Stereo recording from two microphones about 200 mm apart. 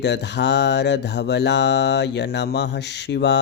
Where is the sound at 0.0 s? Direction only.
60° left (ahead or behind).